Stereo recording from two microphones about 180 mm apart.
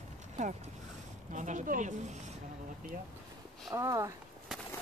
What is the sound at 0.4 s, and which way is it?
Speech, 40° right (ahead or behind).